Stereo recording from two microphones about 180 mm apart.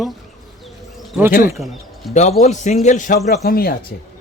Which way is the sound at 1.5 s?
Centre (ahead or behind).